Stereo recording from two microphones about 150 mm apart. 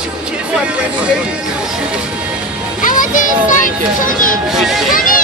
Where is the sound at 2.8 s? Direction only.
60° left (ahead or behind).